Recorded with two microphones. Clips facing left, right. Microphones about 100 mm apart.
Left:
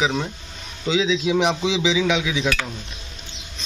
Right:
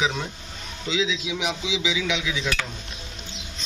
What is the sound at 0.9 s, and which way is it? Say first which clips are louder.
Speech: left 5 dB; 25° left (ahead or behind).